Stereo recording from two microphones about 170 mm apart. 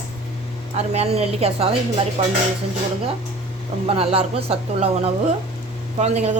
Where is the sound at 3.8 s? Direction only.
35° right (ahead or behind).